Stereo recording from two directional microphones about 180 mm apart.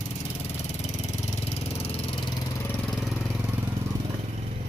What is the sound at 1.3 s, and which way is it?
Vehicle, 35° left (ahead or behind).